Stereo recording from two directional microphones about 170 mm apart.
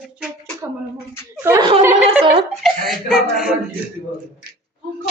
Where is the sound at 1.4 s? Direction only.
15° right (ahead or behind).